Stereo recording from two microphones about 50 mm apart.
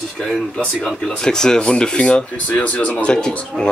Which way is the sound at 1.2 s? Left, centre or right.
Centre.